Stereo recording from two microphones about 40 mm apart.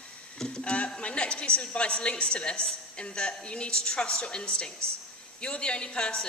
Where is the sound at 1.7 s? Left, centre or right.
Left.